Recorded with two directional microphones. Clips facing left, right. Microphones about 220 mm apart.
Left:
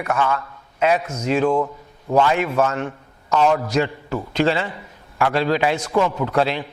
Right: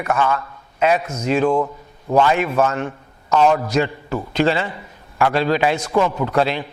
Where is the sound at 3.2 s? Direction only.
25° right (ahead or behind).